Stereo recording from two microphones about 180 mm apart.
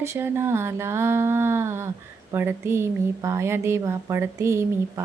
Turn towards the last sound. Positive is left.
turn(degrees=-15)  # may be behind; listen again after turning